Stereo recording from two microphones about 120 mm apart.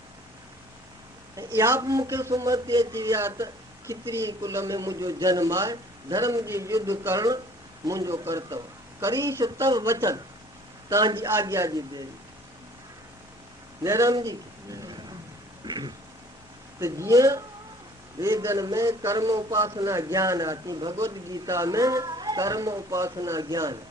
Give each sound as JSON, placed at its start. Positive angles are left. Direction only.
{"t": 1.4, "sound": "a man's voice", "side_deg": -25}
{"t": 13.8, "sound": "a man's voice", "side_deg": -25}
{"t": 15.6, "sound": "a sound", "side_deg": -35}
{"t": 16.8, "sound": "a man's voice", "side_deg": -25}